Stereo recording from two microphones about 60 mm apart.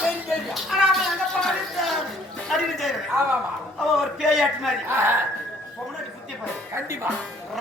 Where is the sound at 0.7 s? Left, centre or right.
Centre.